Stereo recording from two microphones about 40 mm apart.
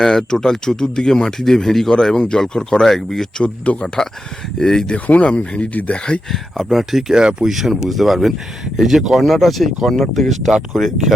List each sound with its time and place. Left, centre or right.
0.0 s speech: centre
3.7 s speech: left
4.6 s speech: centre
5.0 s speech: left
6.7 s speech: centre
7.1 s speech: right
7.5 s speech: centre